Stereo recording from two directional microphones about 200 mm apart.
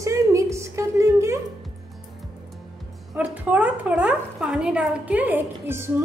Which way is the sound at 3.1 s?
10° right (ahead or behind).